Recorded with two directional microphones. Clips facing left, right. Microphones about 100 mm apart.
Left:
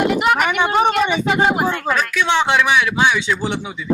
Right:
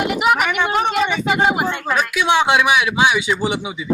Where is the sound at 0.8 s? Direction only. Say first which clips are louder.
Left 2 dB; centre (ahead or behind).